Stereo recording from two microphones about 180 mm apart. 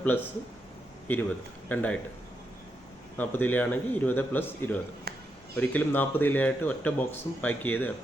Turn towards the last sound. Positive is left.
turn(degrees=10)  # may be behind; listen again after turning